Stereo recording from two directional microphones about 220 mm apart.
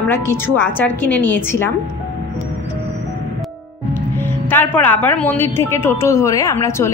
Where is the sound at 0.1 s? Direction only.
10° left (ahead or behind).